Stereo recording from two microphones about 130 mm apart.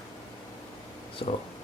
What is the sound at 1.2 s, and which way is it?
Speech, 50° left (ahead or behind).